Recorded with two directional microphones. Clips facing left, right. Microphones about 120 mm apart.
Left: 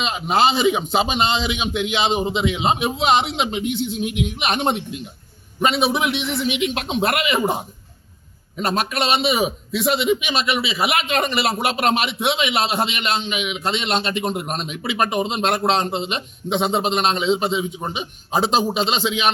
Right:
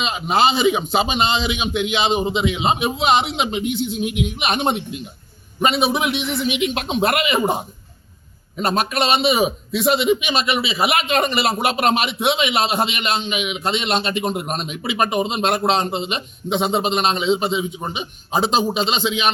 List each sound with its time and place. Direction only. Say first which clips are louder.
0.0 s a man's voice: even; 5° right (ahead or behind)